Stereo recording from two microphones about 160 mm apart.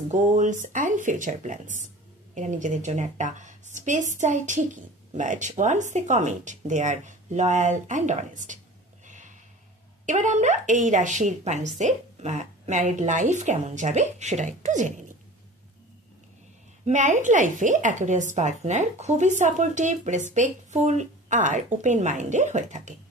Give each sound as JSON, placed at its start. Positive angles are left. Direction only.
{"t": 0.1, "sound": "a woman's voice", "side_deg": -50}
{"t": 9.0, "sound": "snort", "side_deg": -50}
{"t": 10.0, "sound": "a woman's voice", "side_deg": -50}
{"t": 16.8, "sound": "a woman's voice", "side_deg": -50}